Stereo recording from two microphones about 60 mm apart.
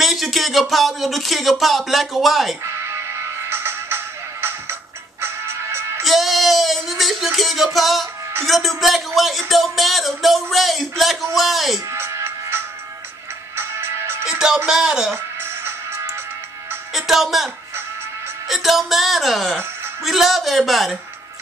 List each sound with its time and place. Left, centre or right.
0.0 s speech: centre
2.6 s music: right
6.0 s a man's voice: centre
11.9 s music: right
14.2 s music: centre
14.7 s speech: centre
15.4 s music: right
16.9 s a man's voice: centre
18.5 s a man's voice: centre